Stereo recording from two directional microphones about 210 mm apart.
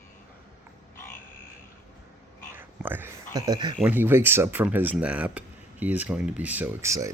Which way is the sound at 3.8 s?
10° right (ahead or behind).